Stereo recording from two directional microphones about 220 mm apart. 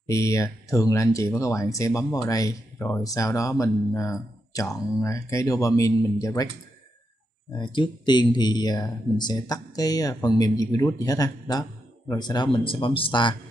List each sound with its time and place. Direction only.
0.0 s speech: 15° left (ahead or behind)
7.5 s speech: 20° left (ahead or behind)